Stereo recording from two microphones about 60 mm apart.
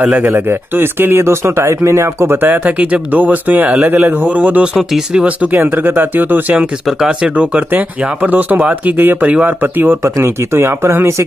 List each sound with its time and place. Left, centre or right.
0.2 s speech: right
2.3 s speech: right
4.7 s speech: centre
5.5 s speech: right
6.9 s speech: centre; by 9.9 s right
10.0 s speech: right